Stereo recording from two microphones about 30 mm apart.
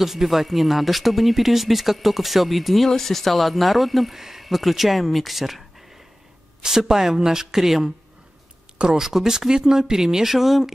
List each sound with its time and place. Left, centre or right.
0.0 s speech: centre
6.8 s speech: centre
8.7 s speech: right
9.0 s speech: centre